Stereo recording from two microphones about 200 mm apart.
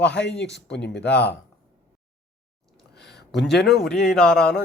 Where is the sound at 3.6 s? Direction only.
Centre (ahead or behind).